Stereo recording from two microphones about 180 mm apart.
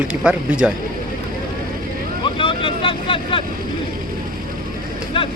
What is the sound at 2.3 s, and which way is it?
Vehicle, 30° left (ahead or behind).